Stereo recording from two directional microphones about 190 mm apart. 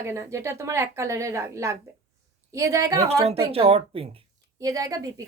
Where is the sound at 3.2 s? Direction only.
30° right (ahead or behind).